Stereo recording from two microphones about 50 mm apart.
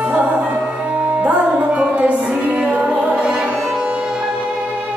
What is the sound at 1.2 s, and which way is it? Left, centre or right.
Music, right.